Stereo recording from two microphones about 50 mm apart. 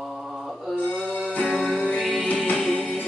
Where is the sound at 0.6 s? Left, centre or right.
Centre.